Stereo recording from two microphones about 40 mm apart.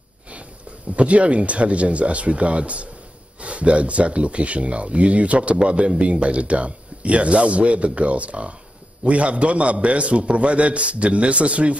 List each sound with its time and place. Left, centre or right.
0.9 s speech: right